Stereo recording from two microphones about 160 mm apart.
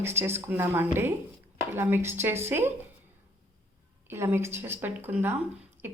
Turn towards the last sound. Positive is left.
turn(degrees=-45)  # may be behind; listen again after turning